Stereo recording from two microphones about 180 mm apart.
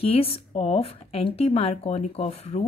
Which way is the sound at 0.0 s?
35° left (ahead or behind).